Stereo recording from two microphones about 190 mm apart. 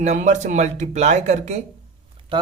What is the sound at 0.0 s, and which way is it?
Speech, 40° right (ahead or behind).